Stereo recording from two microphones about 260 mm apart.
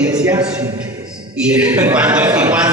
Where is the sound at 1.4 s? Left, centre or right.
Centre.